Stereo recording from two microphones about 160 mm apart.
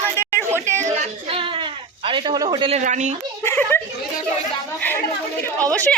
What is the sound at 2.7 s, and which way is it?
Speech, 50° right (ahead or behind).